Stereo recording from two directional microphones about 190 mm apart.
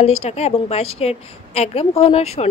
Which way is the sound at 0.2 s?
35° left (ahead or behind).